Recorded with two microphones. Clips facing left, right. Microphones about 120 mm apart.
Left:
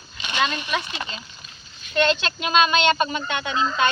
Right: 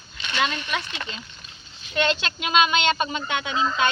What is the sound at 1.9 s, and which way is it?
Speech, 10° right (ahead or behind).